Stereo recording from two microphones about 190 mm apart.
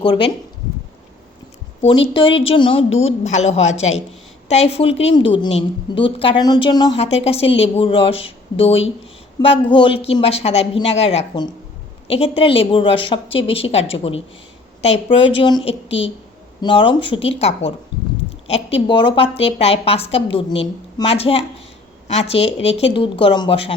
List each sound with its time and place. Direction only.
0.0 s a woman's voice: 25° left (ahead or behind)
2.1 s a woman's voice: 30° left (ahead or behind)